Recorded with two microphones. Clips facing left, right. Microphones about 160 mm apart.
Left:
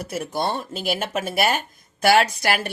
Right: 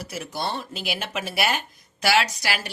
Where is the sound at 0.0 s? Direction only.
50° left (ahead or behind).